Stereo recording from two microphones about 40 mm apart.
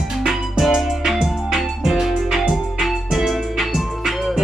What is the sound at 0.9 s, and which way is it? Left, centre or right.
Music, centre.